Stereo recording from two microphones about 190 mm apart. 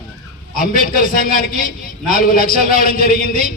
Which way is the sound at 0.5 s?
45° left (ahead or behind).